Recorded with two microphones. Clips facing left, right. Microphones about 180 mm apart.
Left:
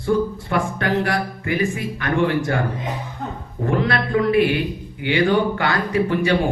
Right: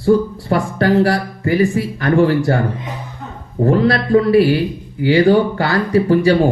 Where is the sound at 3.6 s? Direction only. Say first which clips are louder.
Right 6 dB; 35° right (ahead or behind).